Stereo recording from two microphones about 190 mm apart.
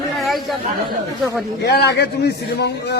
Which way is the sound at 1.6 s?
60° left (ahead or behind).